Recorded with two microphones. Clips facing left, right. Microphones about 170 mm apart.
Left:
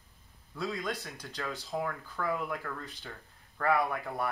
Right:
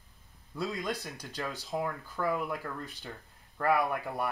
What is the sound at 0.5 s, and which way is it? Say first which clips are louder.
A man's voice: right 1 dB; 20° right (ahead or behind).